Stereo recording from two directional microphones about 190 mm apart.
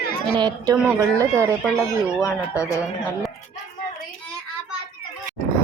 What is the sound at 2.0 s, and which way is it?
Speech, 15° left (ahead or behind).